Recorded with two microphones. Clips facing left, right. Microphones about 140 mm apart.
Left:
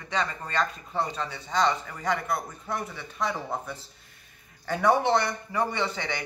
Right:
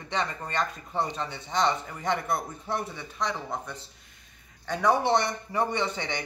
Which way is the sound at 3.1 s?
5° left (ahead or behind).